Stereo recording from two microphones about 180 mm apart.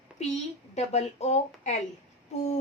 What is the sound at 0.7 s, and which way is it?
A woman's voice, 40° left (ahead or behind).